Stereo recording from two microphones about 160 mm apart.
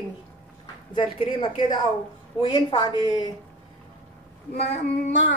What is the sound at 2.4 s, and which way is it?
Speech, 25° left (ahead or behind).